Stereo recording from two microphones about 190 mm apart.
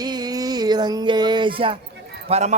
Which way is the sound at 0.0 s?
20° right (ahead or behind).